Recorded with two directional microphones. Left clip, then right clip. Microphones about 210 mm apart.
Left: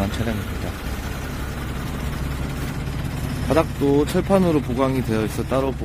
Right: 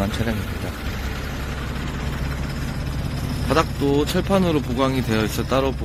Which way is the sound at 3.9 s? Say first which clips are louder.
Left 2 dB; 10° left (ahead or behind).